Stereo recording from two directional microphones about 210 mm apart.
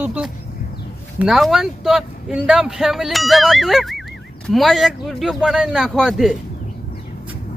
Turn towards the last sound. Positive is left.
turn(degrees=0)  # may be behind; listen again after turning